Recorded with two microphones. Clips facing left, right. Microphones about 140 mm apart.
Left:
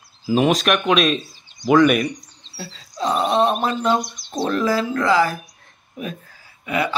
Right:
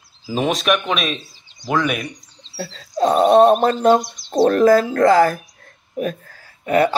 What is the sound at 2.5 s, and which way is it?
Speech, 55° right (ahead or behind).